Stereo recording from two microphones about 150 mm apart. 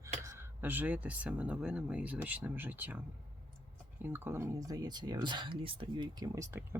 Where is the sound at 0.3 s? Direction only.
15° right (ahead or behind).